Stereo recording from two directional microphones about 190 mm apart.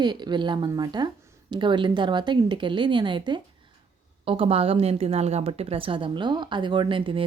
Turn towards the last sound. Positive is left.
turn(degrees=-25)  # may be behind; listen again after turning